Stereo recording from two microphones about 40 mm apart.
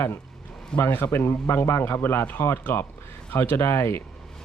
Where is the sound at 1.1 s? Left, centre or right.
Left.